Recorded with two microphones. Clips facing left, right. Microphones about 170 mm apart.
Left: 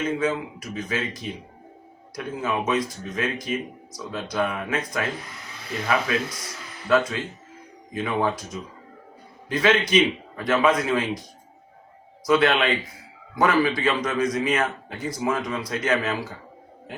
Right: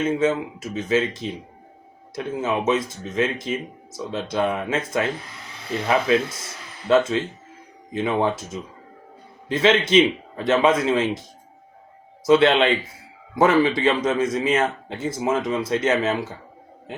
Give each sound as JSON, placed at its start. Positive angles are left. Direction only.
{"t": 0.0, "sound": "a man's voice", "side_deg": -25}
{"t": 12.2, "sound": "a man's voice", "side_deg": -25}